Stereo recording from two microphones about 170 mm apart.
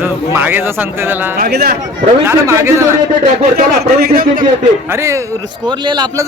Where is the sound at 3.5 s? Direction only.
65° right (ahead or behind).